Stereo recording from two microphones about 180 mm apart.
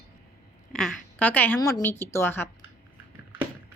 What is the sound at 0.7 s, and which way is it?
A woman's voice, 5° left (ahead or behind).